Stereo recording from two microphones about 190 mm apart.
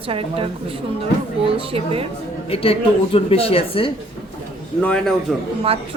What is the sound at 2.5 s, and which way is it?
Speech, 30° left (ahead or behind).